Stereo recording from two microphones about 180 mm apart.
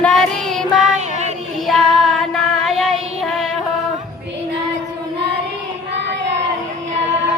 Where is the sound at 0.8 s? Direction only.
40° right (ahead or behind).